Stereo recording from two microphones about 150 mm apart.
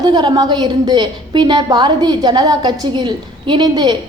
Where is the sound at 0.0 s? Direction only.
25° right (ahead or behind).